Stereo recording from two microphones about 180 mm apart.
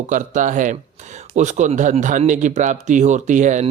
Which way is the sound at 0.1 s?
45° right (ahead or behind).